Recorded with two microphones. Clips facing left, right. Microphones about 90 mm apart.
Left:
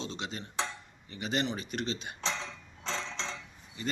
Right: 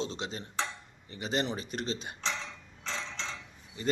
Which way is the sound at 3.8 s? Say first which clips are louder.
Right 5 dB; 35° right (ahead or behind).